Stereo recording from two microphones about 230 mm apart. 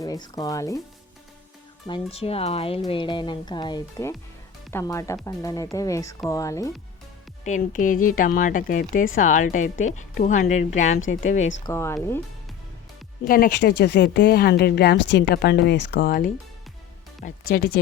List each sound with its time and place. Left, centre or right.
0.0 s speech: centre
1.9 s speech: left
7.4 s speech: left
11.6 s speech: centre
13.2 s speech: left